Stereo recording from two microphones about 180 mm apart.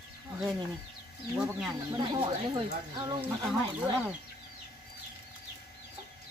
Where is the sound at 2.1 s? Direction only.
25° right (ahead or behind).